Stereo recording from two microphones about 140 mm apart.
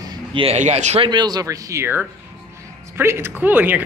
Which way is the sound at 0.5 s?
55° right (ahead or behind).